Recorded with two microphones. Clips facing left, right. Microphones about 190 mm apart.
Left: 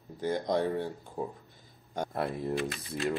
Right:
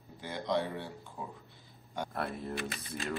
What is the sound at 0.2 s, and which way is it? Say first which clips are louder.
Speech: left 5 dB; 45° left (ahead or behind).